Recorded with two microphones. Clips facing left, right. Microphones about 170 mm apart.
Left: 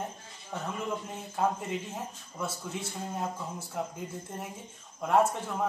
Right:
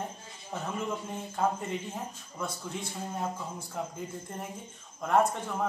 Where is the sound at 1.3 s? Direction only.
5° left (ahead or behind).